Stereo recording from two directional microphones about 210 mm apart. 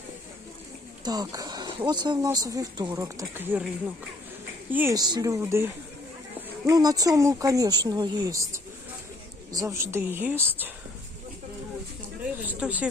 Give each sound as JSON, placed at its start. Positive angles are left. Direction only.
{"t": 1.0, "sound": "speech", "side_deg": -20}
{"t": 4.7, "sound": "speech", "side_deg": -10}
{"t": 12.5, "sound": "speech", "side_deg": -5}